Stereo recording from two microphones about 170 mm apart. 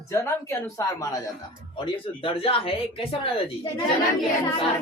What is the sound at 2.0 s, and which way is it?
A woman's voice, 30° left (ahead or behind).